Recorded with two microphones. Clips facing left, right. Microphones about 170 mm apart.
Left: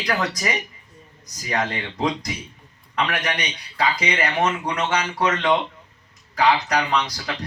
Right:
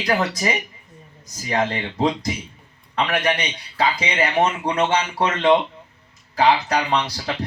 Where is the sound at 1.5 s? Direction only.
30° right (ahead or behind).